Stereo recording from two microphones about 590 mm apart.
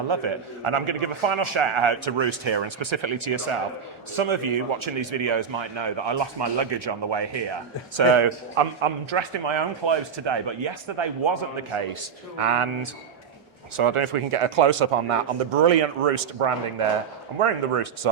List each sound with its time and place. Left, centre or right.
0.1 s a man's voice: right